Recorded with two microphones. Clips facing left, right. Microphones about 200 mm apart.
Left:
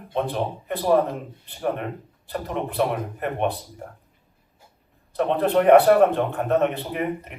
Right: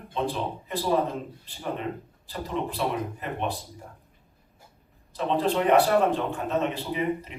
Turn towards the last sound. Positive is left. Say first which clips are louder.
# left 1 dB
turn(degrees=60)  # may be behind; listen again after turning